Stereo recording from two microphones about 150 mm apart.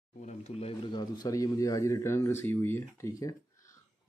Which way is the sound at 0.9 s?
25° left (ahead or behind).